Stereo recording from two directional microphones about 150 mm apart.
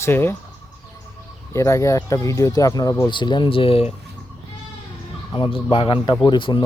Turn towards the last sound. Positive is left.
turn(degrees=30)  # may be behind; listen again after turning